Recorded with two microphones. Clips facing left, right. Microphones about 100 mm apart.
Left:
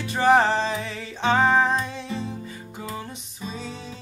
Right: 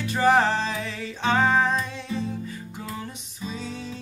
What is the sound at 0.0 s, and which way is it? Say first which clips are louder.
Music: left 1 dB; centre (ahead or behind).